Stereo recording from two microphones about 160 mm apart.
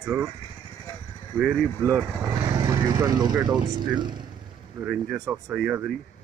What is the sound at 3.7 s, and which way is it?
Speech, 30° right (ahead or behind).